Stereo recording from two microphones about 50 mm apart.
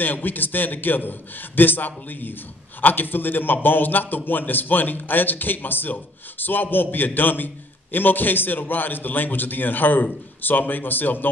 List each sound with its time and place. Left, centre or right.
0.0 s a man's voice: left